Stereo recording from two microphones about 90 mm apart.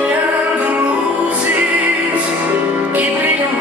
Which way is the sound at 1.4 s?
15° right (ahead or behind).